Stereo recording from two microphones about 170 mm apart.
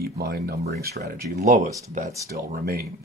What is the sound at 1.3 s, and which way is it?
Speech, 45° right (ahead or behind).